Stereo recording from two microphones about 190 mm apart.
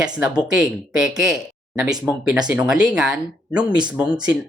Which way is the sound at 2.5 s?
5° right (ahead or behind).